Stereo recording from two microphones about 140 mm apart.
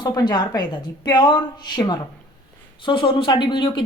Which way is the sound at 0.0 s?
30° left (ahead or behind).